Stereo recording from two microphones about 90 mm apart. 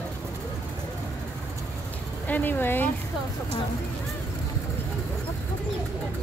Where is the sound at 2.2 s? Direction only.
20° left (ahead or behind).